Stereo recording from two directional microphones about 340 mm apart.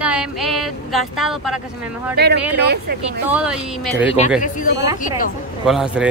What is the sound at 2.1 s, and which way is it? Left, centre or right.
Speech, right.